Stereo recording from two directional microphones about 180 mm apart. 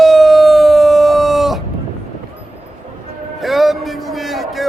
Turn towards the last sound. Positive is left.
turn(degrees=0)  # may be behind; listen again after turning